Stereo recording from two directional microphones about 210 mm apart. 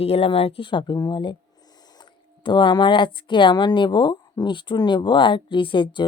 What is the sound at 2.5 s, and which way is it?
Speech, 20° left (ahead or behind).